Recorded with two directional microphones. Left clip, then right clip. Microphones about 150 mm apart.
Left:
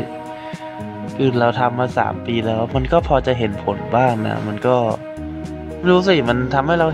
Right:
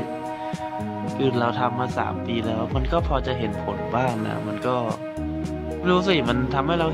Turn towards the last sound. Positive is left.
turn(degrees=35)  # may be behind; listen again after turning